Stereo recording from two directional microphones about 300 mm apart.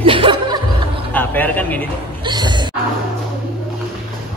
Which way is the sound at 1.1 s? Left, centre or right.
Centre.